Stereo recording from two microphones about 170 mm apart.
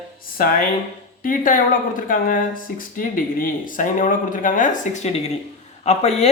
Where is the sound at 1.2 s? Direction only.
55° left (ahead or behind).